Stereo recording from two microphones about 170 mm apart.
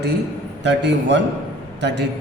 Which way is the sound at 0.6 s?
90° right.